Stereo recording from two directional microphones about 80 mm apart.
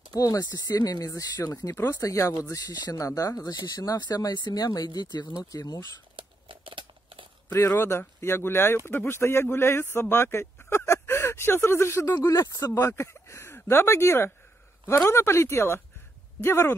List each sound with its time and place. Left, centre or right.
0.1 s speech: left
3.0 s speech: left
6.1 s crumpling: right
7.5 s speech: left